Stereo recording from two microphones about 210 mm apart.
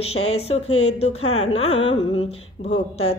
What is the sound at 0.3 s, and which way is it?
Music, 30° left (ahead or behind).